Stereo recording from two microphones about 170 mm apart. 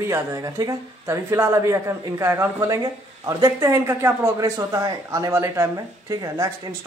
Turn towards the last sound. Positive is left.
turn(degrees=-20)  # may be behind; listen again after turning